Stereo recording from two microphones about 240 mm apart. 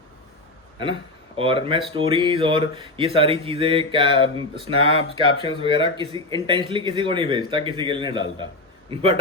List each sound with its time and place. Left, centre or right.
1.4 s speech: right